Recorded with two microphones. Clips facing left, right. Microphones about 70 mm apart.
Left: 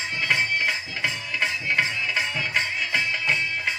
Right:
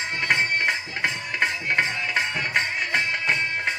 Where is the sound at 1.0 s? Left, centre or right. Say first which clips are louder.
Right 2 dB; right.